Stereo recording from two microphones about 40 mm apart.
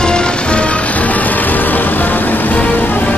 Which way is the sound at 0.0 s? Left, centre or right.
Left.